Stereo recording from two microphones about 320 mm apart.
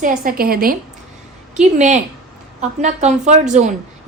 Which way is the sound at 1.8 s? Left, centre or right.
Right.